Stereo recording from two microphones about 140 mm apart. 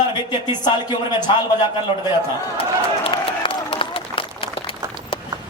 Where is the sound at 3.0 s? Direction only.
40° left (ahead or behind).